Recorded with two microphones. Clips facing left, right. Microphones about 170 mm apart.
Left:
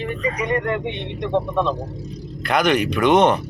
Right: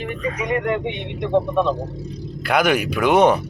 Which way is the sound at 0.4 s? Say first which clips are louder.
Right 2 dB; 10° right (ahead or behind).